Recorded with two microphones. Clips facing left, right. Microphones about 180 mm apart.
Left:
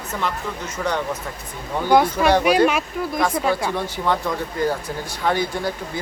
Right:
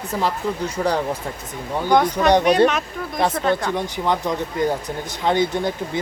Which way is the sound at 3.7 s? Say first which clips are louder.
Right 1 dB; 15° right (ahead or behind).